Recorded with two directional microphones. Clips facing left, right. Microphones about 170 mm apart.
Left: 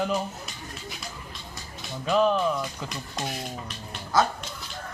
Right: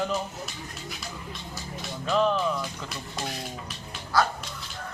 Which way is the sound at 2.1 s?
5° left (ahead or behind).